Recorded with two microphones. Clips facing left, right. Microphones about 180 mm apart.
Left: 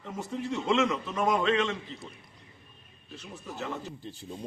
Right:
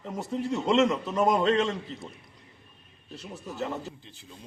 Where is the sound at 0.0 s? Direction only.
40° right (ahead or behind).